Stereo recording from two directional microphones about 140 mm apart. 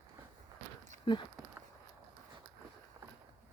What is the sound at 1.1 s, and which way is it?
Speech, 40° left (ahead or behind).